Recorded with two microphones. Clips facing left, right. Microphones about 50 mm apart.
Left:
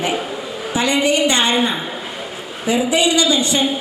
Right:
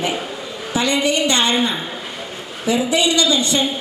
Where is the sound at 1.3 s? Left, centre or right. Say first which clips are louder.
Left 1 dB; centre.